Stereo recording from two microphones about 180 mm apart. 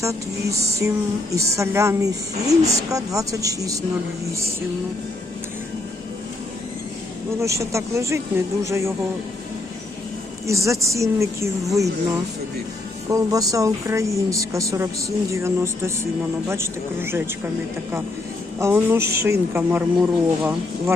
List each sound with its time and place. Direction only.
0.0 s speech: 15° right (ahead or behind)
7.4 s speech: 15° right (ahead or behind)
10.4 s speech: 15° right (ahead or behind)
13.1 s speech: 20° right (ahead or behind)
18.6 s speech: 10° right (ahead or behind)